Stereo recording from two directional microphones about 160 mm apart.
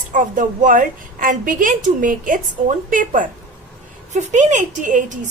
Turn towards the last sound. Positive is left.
turn(degrees=-55)  # may be behind; listen again after turning